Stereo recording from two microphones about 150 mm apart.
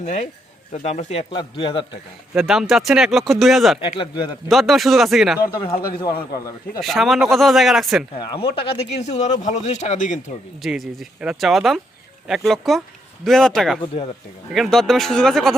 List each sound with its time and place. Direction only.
0.0 s speech: 50° left (ahead or behind)
1.3 s speech: 30° left (ahead or behind)
2.3 s speech: 5° right (ahead or behind)
3.8 s speech: 35° left (ahead or behind)
4.4 s speech: centre (ahead or behind)
5.5 s speech: 35° left (ahead or behind)
6.8 s speech: centre (ahead or behind)
8.3 s speech: 35° left (ahead or behind); by 10.3 s 55° left (ahead or behind)
10.6 s speech: centre (ahead or behind)
13.8 s speech: 40° left (ahead or behind)
14.5 s speech: centre (ahead or behind)